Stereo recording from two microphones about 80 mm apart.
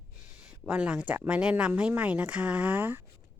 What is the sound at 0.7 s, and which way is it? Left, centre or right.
Speech, centre.